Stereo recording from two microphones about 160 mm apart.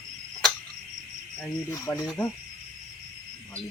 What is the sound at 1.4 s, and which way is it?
Cricket, 20° left (ahead or behind).